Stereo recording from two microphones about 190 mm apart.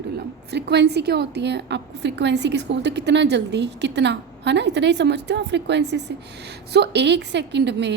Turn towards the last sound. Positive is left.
turn(degrees=-65)  # may be behind; listen again after turning